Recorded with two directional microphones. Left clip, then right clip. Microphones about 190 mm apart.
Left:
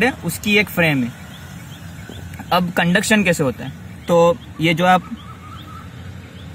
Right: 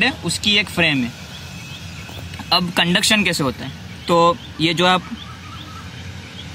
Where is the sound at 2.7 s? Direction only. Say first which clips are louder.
Right 1 dB; 45° left (ahead or behind).